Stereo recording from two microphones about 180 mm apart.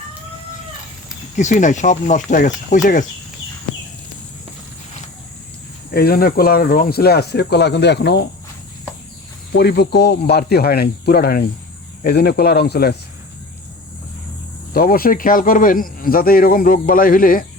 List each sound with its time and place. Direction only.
1.4 s speech: 40° left (ahead or behind)
5.9 s speech: 60° left (ahead or behind)
9.6 s speech: 70° left (ahead or behind)
14.7 s speech: 55° left (ahead or behind)